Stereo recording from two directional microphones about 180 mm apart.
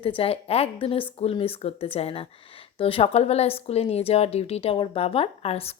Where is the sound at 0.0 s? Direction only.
30° left (ahead or behind).